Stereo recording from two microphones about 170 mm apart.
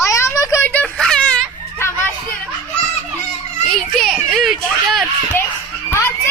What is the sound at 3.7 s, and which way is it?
Children playing, centre (ahead or behind).